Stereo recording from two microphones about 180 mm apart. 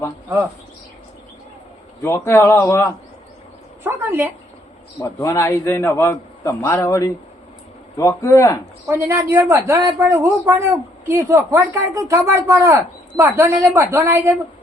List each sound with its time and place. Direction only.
2.0 s a man's voice: 15° left (ahead or behind)
3.8 s a man's voice: 10° right (ahead or behind)
4.9 s a man's voice: 15° left (ahead or behind)
8.9 s a man's voice: 15° right (ahead or behind)